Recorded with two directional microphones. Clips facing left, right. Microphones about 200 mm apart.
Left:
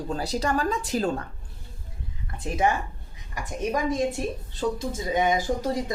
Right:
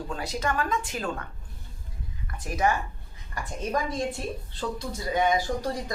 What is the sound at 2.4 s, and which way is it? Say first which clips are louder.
Speech: left 2 dB; 25° left (ahead or behind).